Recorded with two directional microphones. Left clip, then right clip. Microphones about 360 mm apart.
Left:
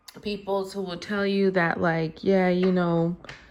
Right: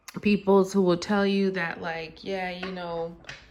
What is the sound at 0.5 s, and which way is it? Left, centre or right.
Speech, centre.